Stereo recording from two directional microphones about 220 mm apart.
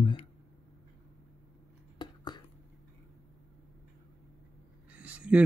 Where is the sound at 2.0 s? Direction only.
20° left (ahead or behind).